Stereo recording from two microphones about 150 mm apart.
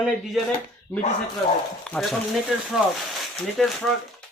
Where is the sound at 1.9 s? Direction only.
5° left (ahead or behind).